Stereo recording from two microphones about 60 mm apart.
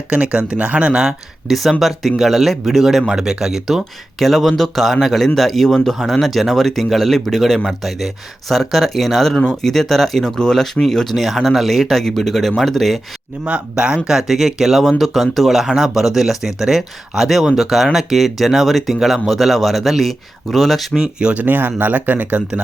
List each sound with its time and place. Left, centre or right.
0.1 s speech: right
1.5 s speech: centre
13.4 s speech: centre
14.2 s speech: centre
21.0 s speech: centre
21.4 s speech: right